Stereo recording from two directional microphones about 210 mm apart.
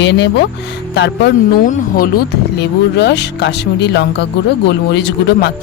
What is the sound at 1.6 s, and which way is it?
Speech, 40° left (ahead or behind).